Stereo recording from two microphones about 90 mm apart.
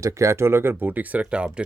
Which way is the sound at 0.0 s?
35° right (ahead or behind).